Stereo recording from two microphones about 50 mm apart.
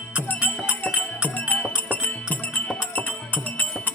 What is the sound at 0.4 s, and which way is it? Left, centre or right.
Music, left.